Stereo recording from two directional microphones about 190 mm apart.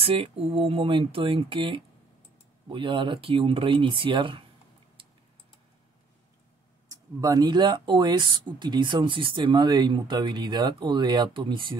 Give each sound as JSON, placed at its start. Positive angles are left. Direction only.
{"t": 0.0, "sound": "speech", "side_deg": -30}
{"t": 6.9, "sound": "speech", "side_deg": -20}